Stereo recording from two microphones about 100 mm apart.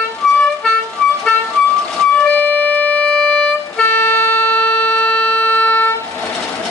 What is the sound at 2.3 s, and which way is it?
Music, 15° left (ahead or behind).